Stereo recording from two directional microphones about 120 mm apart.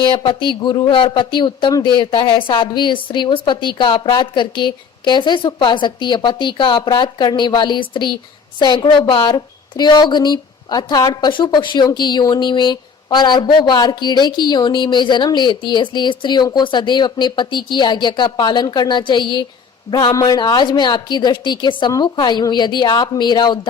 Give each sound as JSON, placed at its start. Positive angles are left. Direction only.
{"t": 0.0, "sound": "speech", "side_deg": 40}